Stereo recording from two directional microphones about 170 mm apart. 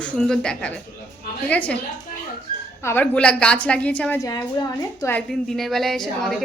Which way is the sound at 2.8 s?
10° left (ahead or behind).